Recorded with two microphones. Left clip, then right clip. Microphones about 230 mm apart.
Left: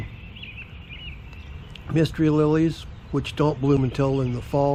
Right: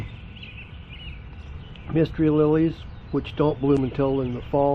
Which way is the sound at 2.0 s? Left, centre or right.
Centre.